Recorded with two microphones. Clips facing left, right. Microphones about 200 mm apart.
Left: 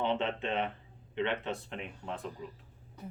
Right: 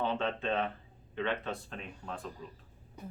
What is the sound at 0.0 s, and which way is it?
Speech, 20° left (ahead or behind).